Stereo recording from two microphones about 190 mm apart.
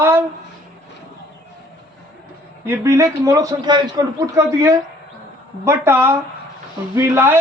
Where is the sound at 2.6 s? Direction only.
15° right (ahead or behind).